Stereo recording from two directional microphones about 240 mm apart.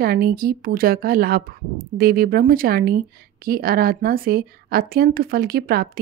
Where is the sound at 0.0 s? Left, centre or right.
Right.